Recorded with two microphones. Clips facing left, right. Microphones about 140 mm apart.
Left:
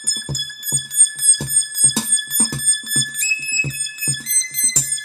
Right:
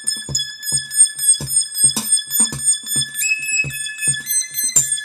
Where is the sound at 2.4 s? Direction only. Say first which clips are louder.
Left 3 dB; 15° right (ahead or behind).